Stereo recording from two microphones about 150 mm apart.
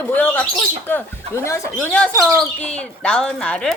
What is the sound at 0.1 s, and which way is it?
Speech, 10° left (ahead or behind).